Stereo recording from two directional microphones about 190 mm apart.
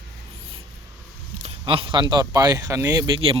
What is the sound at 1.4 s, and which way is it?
Speech, 30° right (ahead or behind).